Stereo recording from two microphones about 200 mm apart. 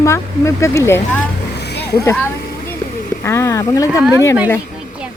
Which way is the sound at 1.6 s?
55° left (ahead or behind).